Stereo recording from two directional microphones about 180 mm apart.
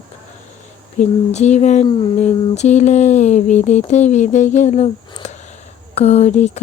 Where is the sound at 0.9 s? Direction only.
40° left (ahead or behind).